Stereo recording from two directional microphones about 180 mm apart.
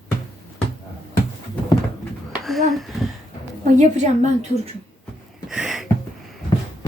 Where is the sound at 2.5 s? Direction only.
Centre (ahead or behind).